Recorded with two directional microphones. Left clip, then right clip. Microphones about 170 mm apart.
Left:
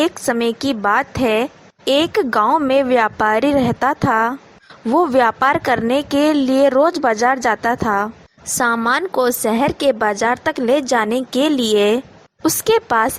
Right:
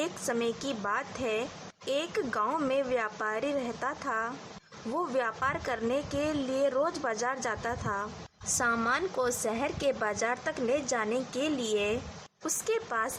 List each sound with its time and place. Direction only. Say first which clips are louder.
0.0 s a woman's voice: left 14 dB; 45° left (ahead or behind)